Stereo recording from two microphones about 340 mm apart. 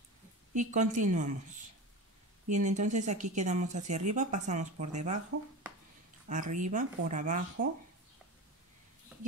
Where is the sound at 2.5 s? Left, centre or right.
Right.